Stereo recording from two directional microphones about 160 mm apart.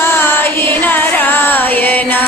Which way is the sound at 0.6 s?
10° left (ahead or behind).